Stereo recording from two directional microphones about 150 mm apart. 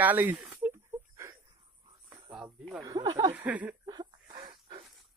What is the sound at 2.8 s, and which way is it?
Speech, 25° right (ahead or behind).